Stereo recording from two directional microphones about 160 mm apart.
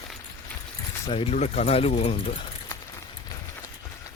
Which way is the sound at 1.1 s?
35° left (ahead or behind).